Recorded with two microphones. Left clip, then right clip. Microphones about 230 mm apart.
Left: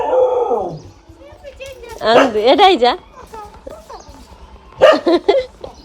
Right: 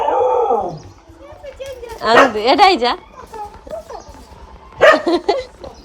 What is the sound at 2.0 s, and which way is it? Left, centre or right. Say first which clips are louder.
A woman's voice: even; left.